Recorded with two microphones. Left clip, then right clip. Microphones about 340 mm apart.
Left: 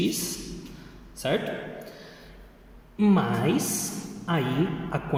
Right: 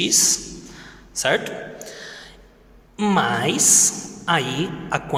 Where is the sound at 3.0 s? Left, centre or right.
Right.